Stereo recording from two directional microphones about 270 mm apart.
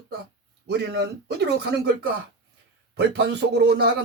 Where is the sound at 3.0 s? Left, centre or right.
Right.